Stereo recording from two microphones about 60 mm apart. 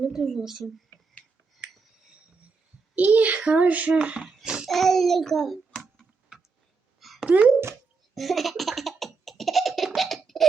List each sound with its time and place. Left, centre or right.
0.0 s speech: centre
2.9 s a child's voice: right
4.4 s babbling: centre
4.7 s a child's voice: centre
7.0 s a sound: centre
7.3 s speech: right
8.1 s laughter: centre